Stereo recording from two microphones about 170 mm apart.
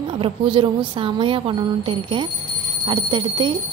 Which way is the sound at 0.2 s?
30° right (ahead or behind).